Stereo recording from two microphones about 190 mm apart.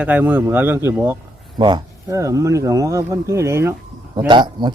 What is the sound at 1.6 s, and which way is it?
Speech, 25° right (ahead or behind).